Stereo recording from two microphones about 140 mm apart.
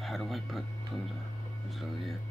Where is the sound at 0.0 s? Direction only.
Centre (ahead or behind).